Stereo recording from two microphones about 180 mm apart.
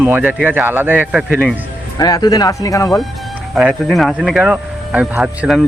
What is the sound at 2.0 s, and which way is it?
Speech, 20° left (ahead or behind).